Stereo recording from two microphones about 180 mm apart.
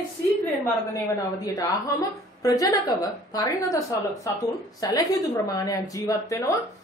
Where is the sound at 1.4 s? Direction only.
20° left (ahead or behind).